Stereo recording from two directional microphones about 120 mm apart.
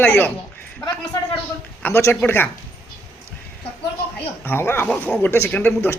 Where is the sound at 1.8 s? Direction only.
20° left (ahead or behind).